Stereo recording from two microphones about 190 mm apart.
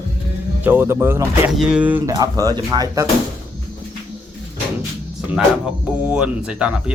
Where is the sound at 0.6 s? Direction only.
10° right (ahead or behind).